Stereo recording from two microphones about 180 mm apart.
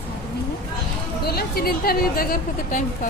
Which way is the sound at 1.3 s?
60° left (ahead or behind).